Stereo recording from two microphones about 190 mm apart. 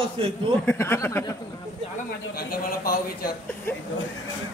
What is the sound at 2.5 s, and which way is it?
Speech, 50° left (ahead or behind).